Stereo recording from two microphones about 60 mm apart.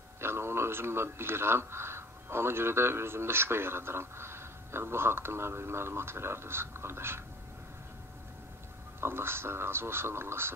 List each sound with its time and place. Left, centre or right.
0.2 s speech: right
9.0 s speech: right